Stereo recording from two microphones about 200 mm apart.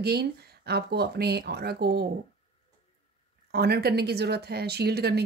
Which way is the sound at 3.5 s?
50° right (ahead or behind).